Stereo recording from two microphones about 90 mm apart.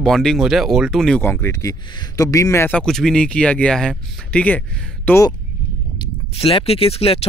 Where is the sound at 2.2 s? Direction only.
35° left (ahead or behind).